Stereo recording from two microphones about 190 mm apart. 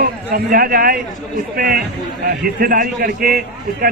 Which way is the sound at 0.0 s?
50° right (ahead or behind).